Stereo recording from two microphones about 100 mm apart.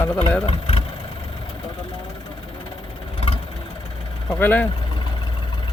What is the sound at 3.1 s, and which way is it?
Vehicle, 65° left (ahead or behind).